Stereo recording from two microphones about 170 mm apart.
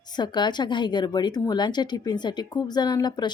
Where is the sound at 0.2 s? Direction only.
25° left (ahead or behind).